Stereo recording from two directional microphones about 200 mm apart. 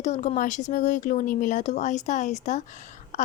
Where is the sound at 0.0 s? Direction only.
35° left (ahead or behind).